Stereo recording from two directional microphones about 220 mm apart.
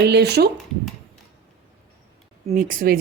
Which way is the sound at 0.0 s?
50° right (ahead or behind).